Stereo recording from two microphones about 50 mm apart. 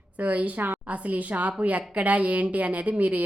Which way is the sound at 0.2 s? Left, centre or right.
Right.